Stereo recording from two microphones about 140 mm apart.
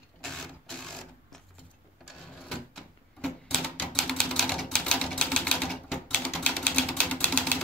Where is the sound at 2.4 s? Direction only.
5° left (ahead or behind).